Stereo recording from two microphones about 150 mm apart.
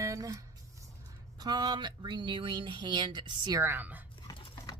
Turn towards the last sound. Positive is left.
turn(degrees=25)  # may be behind; listen again after turning